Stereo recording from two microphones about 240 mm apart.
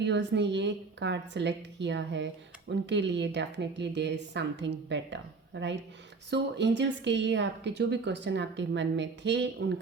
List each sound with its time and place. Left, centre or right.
0.0 s a woman's voice: right